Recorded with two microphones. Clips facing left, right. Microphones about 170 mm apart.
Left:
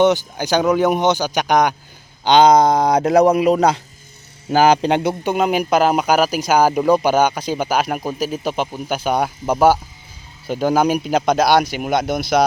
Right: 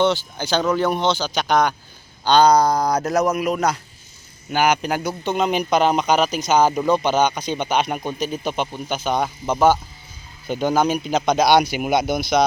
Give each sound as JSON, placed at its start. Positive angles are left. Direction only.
{"t": 0.0, "sound": "speech", "side_deg": 15}
{"t": 5.2, "sound": "speech", "side_deg": 5}